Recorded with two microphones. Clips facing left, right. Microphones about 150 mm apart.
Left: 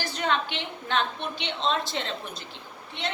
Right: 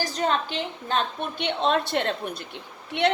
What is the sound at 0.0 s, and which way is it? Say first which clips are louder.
A woman's voice: right 3 dB; 40° right (ahead or behind).